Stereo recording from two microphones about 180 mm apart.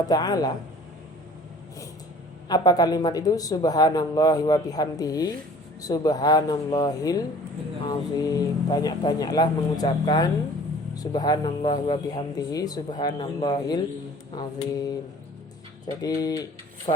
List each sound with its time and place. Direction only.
0.1 s speech: 20° left (ahead or behind)
2.5 s speech: 20° left (ahead or behind)